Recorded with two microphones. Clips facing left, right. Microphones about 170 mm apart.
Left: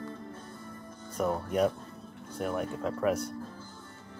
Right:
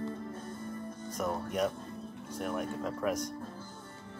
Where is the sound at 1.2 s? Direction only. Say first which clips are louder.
Left 4 dB; centre (ahead or behind).